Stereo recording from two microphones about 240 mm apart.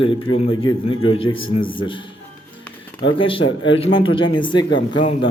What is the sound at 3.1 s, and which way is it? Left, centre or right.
Speech, left.